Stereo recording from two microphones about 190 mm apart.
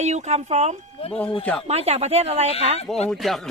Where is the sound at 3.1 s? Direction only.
Centre (ahead or behind).